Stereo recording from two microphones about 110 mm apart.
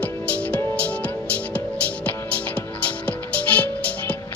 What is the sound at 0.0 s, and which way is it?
Music, 10° left (ahead or behind).